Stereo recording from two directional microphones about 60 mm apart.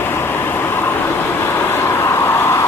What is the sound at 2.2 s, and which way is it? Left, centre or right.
Vehicle, left.